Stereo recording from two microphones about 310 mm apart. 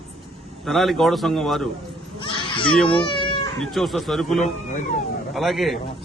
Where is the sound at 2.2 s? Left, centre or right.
Centre.